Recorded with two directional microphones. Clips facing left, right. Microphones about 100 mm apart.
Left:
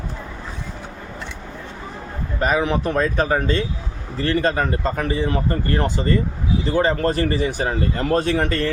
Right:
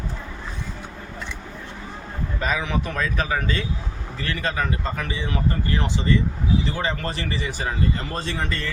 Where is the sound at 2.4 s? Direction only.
45° left (ahead or behind).